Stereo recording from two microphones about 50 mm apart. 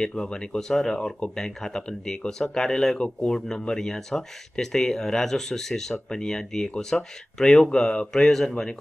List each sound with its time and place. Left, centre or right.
0.0 s speech: centre